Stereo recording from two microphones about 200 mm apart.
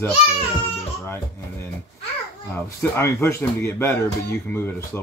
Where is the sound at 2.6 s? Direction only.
15° left (ahead or behind).